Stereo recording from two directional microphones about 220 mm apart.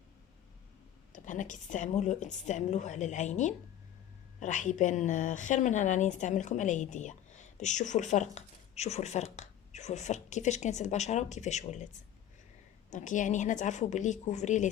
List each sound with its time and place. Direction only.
1.1 s speech: 35° left (ahead or behind)
12.9 s speech: 35° left (ahead or behind)